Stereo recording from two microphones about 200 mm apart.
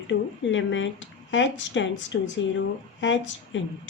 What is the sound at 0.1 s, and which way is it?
A woman's voice, 70° left (ahead or behind).